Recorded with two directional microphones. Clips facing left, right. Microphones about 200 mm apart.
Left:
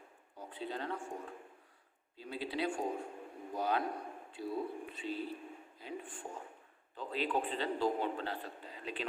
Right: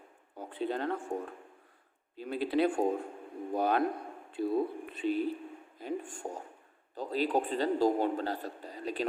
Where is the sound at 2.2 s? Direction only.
55° right (ahead or behind).